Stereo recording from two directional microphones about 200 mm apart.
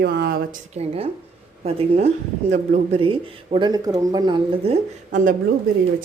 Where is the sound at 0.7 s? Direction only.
30° right (ahead or behind).